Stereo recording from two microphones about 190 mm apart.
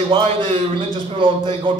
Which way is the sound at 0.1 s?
25° right (ahead or behind).